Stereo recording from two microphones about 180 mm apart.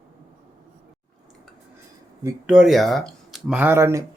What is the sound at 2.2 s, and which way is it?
Speech, 15° right (ahead or behind).